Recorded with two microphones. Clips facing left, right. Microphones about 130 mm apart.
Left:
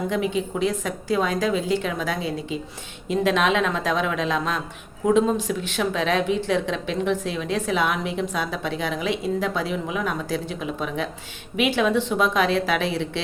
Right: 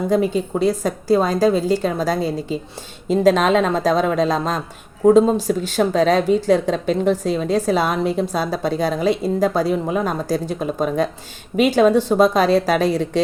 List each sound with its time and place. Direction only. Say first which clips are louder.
0.1 s speech: right 6 dB; 40° right (ahead or behind)